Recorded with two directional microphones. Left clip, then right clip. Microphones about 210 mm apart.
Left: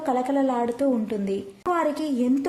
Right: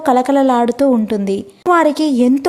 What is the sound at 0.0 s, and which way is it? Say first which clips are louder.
A woman's voice: right 11 dB; 40° right (ahead or behind).